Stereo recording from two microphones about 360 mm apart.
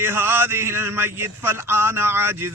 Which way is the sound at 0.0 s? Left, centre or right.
Centre.